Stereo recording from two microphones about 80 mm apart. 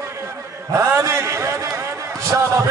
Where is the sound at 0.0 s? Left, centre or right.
Right.